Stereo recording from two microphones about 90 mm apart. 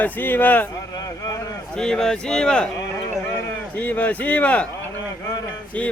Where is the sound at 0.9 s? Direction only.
40° left (ahead or behind).